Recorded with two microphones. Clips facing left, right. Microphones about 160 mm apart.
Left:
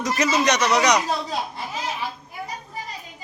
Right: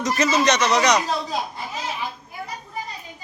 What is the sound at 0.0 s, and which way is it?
A man's voice, 10° left (ahead or behind).